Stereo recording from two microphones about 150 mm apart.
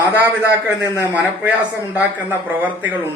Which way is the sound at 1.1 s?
10° right (ahead or behind).